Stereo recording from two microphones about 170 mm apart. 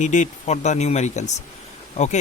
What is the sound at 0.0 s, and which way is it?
Speech, 45° left (ahead or behind).